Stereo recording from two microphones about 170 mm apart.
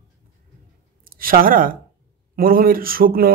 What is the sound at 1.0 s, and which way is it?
A man's voice, 55° right (ahead or behind).